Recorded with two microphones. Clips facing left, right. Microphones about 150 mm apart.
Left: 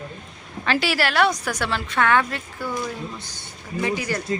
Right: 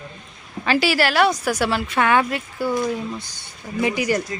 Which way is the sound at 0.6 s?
5° right (ahead or behind).